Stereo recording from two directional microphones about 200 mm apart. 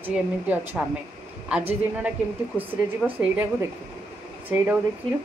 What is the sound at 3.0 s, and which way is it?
Speech, centre (ahead or behind).